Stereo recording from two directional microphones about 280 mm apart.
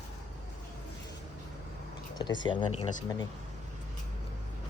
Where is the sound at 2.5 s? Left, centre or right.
Centre.